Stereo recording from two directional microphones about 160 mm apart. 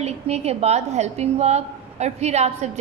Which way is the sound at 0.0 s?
40° right (ahead or behind).